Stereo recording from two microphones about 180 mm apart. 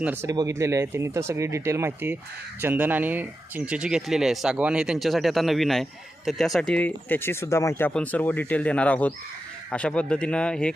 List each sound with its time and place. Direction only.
0.0 s speech: 10° right (ahead or behind); by 10.8 s 5° left (ahead or behind)